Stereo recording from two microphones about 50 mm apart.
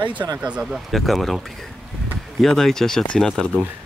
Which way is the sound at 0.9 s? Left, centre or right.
Centre.